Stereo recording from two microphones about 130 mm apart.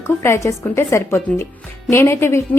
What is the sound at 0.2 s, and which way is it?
A woman's voice, 20° left (ahead or behind).